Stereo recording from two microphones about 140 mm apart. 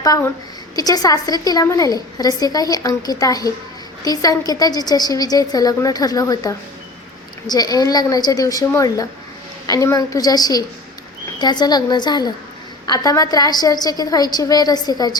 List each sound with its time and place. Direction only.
0.0 s a woman's voice: 25° left (ahead or behind)